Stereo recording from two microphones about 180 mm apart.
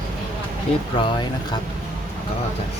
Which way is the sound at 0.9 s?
30° left (ahead or behind).